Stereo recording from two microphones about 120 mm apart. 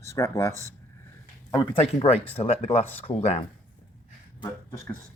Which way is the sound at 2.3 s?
60° left (ahead or behind).